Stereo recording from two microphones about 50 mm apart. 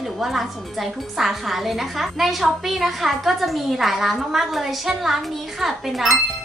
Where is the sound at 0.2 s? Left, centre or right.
Centre.